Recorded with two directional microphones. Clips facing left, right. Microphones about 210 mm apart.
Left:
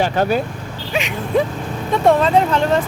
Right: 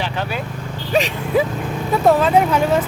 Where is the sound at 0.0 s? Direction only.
45° left (ahead or behind).